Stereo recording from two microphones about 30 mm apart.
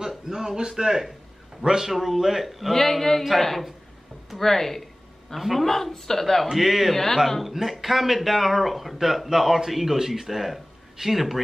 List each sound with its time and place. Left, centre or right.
0.3 s a man's voice: right
1.8 s a man's voice: centre
2.7 s speech: centre
6.6 s a man's voice: centre
6.9 s speech: centre
7.4 s a man's voice: centre